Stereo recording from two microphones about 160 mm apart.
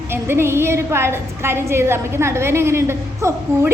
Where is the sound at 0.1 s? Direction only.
15° right (ahead or behind).